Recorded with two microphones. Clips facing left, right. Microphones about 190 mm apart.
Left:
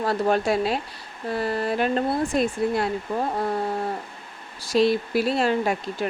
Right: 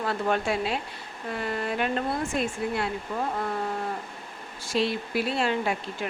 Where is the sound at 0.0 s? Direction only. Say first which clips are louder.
Left 5 dB; 35° left (ahead or behind).